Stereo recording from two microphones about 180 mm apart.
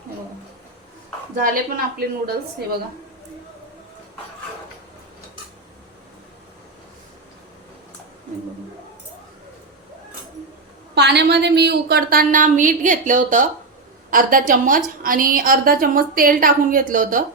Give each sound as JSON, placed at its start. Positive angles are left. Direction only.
{"t": 1.4, "sound": "a woman's voice", "side_deg": -50}
{"t": 10.9, "sound": "a woman's voice", "side_deg": -70}